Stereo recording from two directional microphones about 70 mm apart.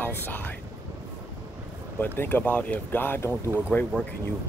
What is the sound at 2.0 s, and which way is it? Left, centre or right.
Speech, left.